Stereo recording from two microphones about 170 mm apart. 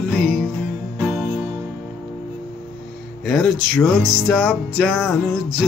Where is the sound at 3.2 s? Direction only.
Centre (ahead or behind).